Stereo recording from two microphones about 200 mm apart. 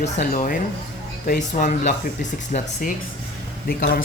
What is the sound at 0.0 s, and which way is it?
Speech, 40° left (ahead or behind).